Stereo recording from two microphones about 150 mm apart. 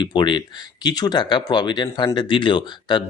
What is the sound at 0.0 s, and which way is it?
Speech, 30° left (ahead or behind).